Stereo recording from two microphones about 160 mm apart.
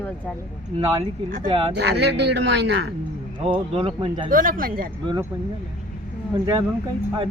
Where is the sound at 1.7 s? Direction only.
90° right.